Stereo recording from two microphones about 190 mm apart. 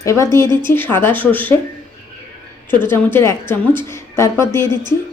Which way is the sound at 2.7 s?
10° left (ahead or behind).